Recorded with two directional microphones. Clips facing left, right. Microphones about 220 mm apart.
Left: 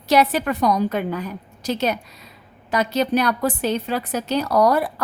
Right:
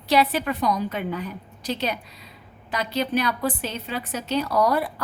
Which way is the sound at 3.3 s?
45° left (ahead or behind).